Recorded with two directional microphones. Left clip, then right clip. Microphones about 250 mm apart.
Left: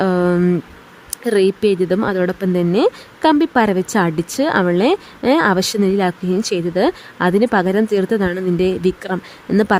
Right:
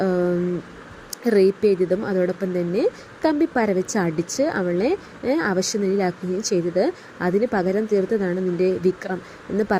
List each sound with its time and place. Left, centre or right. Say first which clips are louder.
0.0 s a sound: left 5 dB; left
1.2 s speech: left 2 dB; left
1.5 s speech: left 3 dB; centre
1.8 s speech: left 4 dB; left